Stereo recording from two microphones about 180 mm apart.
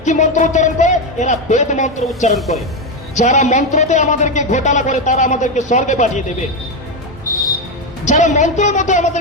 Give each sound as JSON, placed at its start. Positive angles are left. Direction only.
{"t": 0.0, "sound": "a man's voice", "side_deg": 40}
{"t": 8.0, "sound": "speech", "side_deg": 40}